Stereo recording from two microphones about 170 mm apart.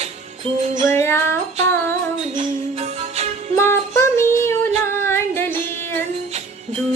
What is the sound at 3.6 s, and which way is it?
Music, 15° left (ahead or behind).